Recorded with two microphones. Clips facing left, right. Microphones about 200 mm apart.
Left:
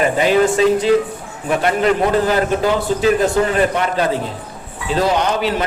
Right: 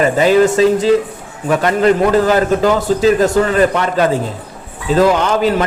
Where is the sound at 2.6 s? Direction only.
40° right (ahead or behind).